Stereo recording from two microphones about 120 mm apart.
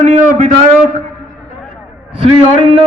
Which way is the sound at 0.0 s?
90° right.